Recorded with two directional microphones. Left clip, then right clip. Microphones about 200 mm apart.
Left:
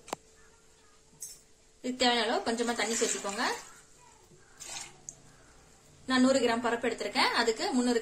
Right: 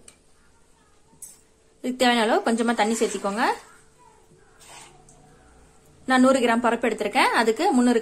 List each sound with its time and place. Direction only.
1.8 s a woman's voice: 40° right (ahead or behind)
6.0 s a woman's voice: 45° right (ahead or behind)